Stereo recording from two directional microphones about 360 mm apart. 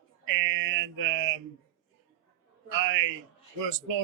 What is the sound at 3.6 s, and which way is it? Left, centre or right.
Speech, right.